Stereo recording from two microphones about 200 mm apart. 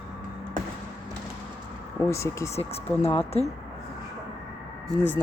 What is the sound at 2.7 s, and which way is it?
Speech, 30° left (ahead or behind).